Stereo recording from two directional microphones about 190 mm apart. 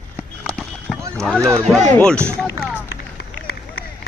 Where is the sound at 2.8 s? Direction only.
60° left (ahead or behind).